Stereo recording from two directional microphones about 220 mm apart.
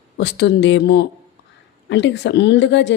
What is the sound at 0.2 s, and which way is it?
A woman's voice, 50° left (ahead or behind).